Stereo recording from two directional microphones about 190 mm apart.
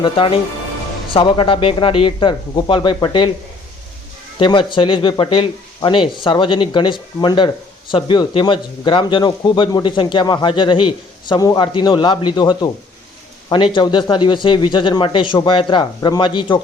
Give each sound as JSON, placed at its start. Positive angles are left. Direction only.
{"t": 0.0, "sound": "speech", "side_deg": 25}
{"t": 4.4, "sound": "speech", "side_deg": 25}
{"t": 13.7, "sound": "speech", "side_deg": 25}